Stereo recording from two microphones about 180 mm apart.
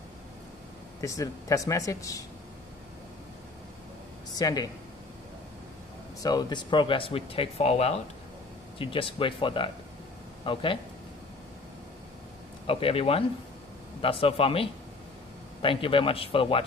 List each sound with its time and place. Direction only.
1.0 s speech: 20° left (ahead or behind)
4.4 s speech: 20° left (ahead or behind)
6.2 s speech: 25° left (ahead or behind)
12.6 s a man's voice: 30° left (ahead or behind)